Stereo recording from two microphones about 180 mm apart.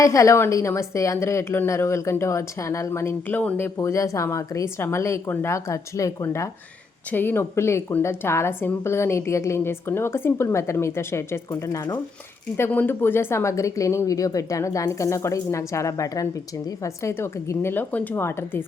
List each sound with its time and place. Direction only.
0.0 s a woman's voice: 15° left (ahead or behind)